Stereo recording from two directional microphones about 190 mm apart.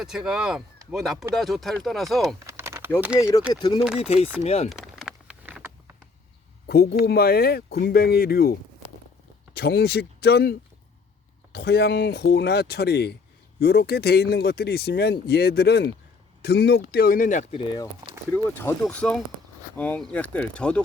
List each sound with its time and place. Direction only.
0.0 s speech: 5° right (ahead or behind)
2.5 s typing: 15° right (ahead or behind)
3.2 s speech: 15° left (ahead or behind)
3.8 s speech: 5° right (ahead or behind)
4.4 s speech: 35° left (ahead or behind)
4.7 s a sound: centre (ahead or behind)
6.7 s speech: 55° left (ahead or behind)
9.6 s speech: 55° left (ahead or behind)
18.3 s speech: 10° left (ahead or behind)